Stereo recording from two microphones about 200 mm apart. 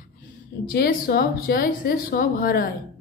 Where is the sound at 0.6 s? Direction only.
50° left (ahead or behind).